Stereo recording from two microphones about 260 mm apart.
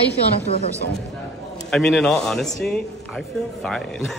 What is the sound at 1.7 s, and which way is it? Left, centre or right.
Speech, centre.